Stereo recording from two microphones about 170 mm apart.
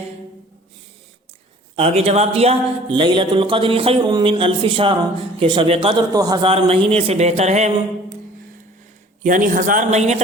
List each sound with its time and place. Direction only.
1.7 s speech: 35° right (ahead or behind)
9.2 s a man's voice: 50° right (ahead or behind)